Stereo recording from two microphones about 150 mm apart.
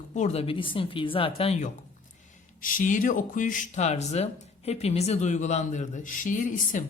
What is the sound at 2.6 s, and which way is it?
Speech, 65° left (ahead or behind).